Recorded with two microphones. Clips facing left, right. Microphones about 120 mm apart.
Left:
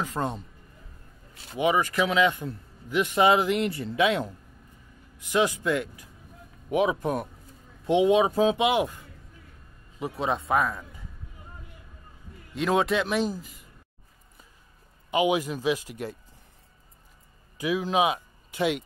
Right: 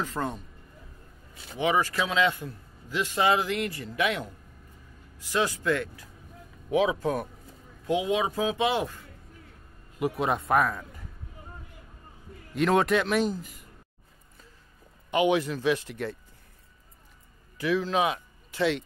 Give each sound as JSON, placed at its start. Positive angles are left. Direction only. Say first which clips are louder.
{"t": 0.0, "sound": "speech", "louder": "left 1 dB", "side_deg": 15}
{"t": 1.6, "sound": "a man's voice", "louder": "left 2 dB", "side_deg": 15}
{"t": 5.2, "sound": "speech", "louder": "left 3 dB", "side_deg": 15}
{"t": 7.0, "sound": "a man's voice", "louder": "even", "side_deg": 20}
{"t": 8.5, "sound": "speech", "louder": "left 3 dB", "side_deg": 15}
{"t": 9.9, "sound": "a man's voice", "louder": "right 5 dB", "side_deg": 25}
{"t": 10.5, "sound": "speech", "louder": "right 2 dB", "side_deg": 0}
{"t": 12.6, "sound": "speech", "louder": "right 1 dB", "side_deg": 0}
{"t": 15.0, "sound": "speech", "louder": "even", "side_deg": 10}
{"t": 17.6, "sound": "speech", "louder": "left 1 dB", "side_deg": 15}